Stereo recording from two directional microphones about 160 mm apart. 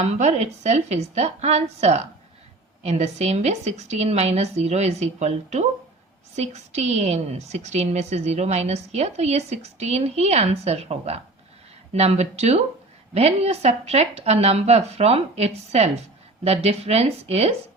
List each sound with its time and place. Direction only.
0.0 s a woman's voice: 45° right (ahead or behind)